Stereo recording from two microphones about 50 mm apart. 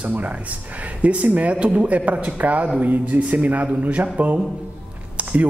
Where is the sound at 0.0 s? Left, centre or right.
Right.